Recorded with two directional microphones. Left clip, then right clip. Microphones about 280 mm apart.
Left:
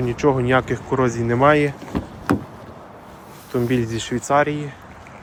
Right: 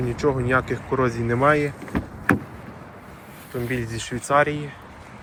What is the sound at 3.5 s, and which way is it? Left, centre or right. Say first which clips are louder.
Speech: left 7 dB; left.